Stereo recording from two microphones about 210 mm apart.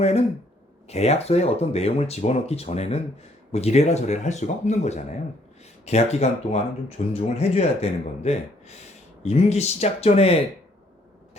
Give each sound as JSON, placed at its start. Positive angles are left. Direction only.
{"t": 0.9, "sound": "speech", "side_deg": 30}